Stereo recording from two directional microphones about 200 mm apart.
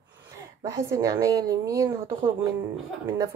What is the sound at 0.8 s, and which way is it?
Speech, 15° right (ahead or behind).